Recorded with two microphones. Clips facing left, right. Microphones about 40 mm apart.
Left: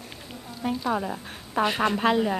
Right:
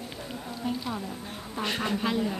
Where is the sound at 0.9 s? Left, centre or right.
Left.